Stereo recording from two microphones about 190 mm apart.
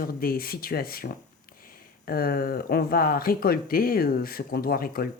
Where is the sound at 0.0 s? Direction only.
50° left (ahead or behind).